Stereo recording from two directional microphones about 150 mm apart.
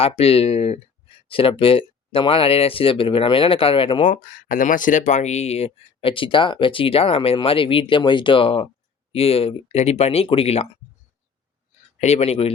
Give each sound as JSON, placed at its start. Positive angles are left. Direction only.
{"t": 0.0, "sound": "speech", "side_deg": 40}
{"t": 4.0, "sound": "speech", "side_deg": 65}
{"t": 11.9, "sound": "speech", "side_deg": 45}